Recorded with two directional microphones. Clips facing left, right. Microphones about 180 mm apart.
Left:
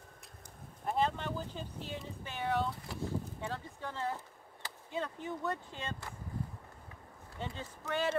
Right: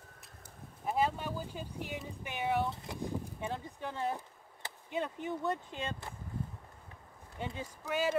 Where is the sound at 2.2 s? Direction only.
15° right (ahead or behind).